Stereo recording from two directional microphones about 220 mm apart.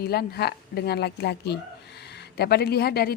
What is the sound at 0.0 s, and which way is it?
A woman's voice, 45° left (ahead or behind).